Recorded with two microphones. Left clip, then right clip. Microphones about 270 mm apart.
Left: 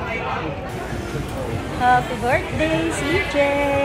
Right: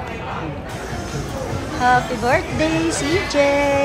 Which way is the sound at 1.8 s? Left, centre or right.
Centre.